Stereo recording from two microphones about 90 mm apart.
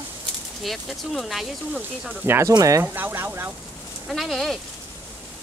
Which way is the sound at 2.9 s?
20° right (ahead or behind).